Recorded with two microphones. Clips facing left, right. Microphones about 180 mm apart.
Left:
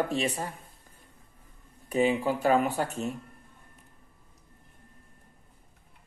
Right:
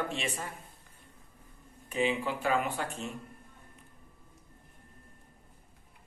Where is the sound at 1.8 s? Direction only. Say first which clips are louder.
Left 5 dB; 40° left (ahead or behind).